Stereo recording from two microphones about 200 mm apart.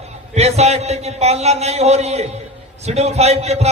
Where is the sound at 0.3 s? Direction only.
35° right (ahead or behind).